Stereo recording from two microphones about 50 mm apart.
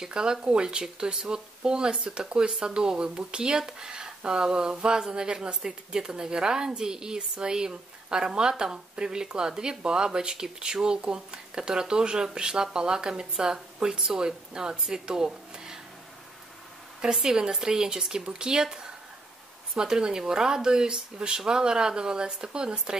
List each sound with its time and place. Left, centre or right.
0.0 s speech: centre
17.0 s speech: centre